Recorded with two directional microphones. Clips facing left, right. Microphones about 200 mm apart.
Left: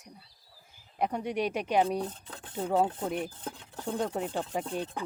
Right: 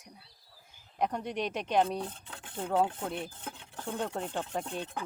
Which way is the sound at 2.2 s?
40° left (ahead or behind).